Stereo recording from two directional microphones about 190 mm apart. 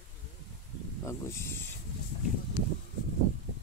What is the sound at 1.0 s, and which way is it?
Mantra, 15° left (ahead or behind).